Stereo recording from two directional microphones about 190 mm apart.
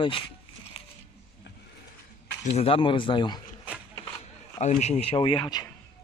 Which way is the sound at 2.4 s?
30° left (ahead or behind).